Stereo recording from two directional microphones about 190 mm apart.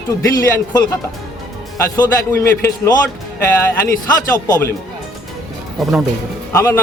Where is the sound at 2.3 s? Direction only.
15° left (ahead or behind).